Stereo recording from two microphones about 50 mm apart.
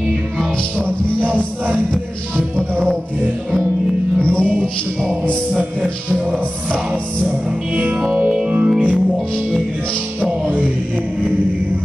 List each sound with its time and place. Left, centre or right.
0.7 s music: right
4.2 s music: left
7.7 s music: right